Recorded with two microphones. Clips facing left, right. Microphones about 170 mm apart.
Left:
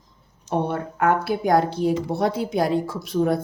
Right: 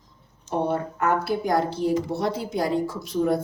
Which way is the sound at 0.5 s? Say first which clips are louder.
Left 1 dB; 60° left (ahead or behind).